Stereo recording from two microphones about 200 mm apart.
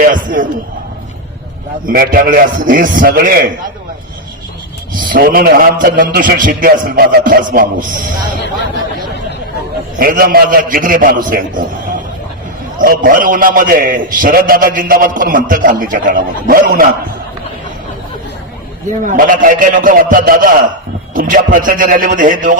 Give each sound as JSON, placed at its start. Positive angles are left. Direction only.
{"t": 0.0, "sound": "a man's voice", "side_deg": -40}
{"t": 1.9, "sound": "a man's voice", "side_deg": -45}
{"t": 5.0, "sound": "a man's voice", "side_deg": -45}
{"t": 10.0, "sound": "a man's voice", "side_deg": -45}
{"t": 12.8, "sound": "a man's voice", "side_deg": -45}
{"t": 19.0, "sound": "a man's voice", "side_deg": -45}